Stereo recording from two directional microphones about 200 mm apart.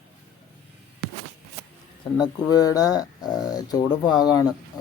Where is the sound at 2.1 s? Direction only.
20° left (ahead or behind).